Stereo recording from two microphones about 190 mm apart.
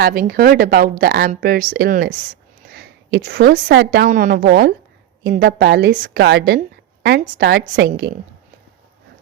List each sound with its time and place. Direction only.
0.0 s a woman's voice: 50° right (ahead or behind)
3.2 s a woman's voice: 60° right (ahead or behind)
4.1 s a woman's voice: 45° right (ahead or behind)